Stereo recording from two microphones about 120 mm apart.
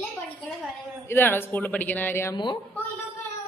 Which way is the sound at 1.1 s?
20° left (ahead or behind).